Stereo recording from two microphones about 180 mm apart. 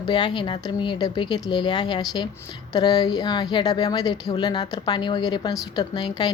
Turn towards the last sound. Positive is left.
turn(degrees=25)  # may be behind; listen again after turning